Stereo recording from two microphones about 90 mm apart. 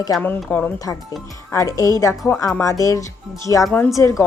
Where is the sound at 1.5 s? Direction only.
40° left (ahead or behind).